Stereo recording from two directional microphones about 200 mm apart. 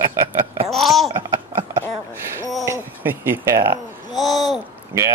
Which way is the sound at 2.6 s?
10° right (ahead or behind).